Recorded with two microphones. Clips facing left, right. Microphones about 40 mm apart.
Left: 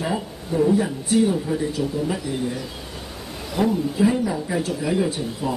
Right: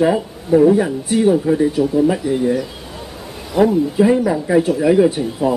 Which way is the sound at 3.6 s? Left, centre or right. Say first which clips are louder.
Right 6 dB; right.